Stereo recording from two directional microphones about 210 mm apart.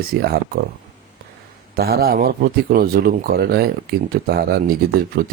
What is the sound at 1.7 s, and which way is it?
Speech, 50° right (ahead or behind).